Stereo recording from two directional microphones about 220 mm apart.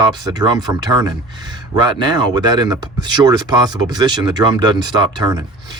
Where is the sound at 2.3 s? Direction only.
20° right (ahead or behind).